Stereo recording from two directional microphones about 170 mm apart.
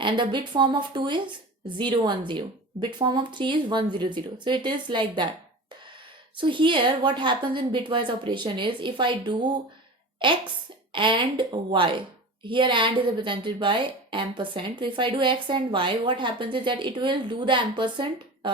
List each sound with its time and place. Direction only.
0.0 s a woman's voice: 30° right (ahead or behind)
6.3 s a woman's voice: 30° right (ahead or behind)